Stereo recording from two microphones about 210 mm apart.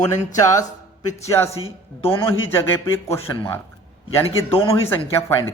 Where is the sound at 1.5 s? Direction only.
25° left (ahead or behind).